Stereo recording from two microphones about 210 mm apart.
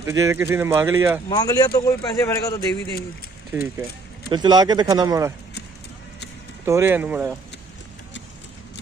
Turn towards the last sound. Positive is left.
turn(degrees=-5)  # may be behind; listen again after turning